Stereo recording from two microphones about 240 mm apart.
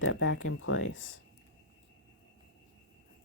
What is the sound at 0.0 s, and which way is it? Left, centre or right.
Speech, left.